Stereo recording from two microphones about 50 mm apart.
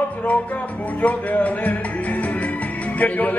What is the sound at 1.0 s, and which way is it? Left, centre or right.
Music, left.